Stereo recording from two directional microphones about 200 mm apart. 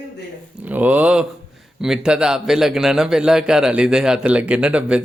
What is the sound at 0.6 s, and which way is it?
A man's voice, 10° right (ahead or behind).